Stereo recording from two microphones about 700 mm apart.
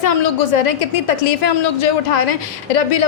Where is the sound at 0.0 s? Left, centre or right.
Left.